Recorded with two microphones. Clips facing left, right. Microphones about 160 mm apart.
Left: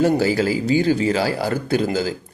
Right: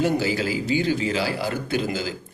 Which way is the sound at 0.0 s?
40° left (ahead or behind).